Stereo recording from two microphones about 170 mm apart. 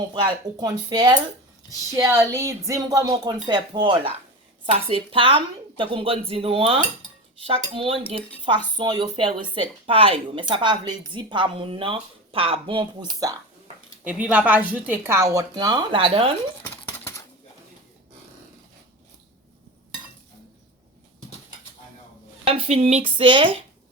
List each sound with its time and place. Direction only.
0.1 s a woman's voice: 25° right (ahead or behind)
14.0 s a woman's voice: 10° right (ahead or behind); by 16.3 s 30° right (ahead or behind)
16.6 s a sound: 15° left (ahead or behind)
22.4 s speech: 35° right (ahead or behind)